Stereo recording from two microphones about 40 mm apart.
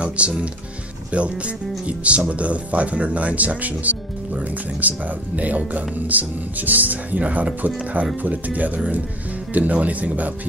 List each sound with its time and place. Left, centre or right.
0.2 s speech: right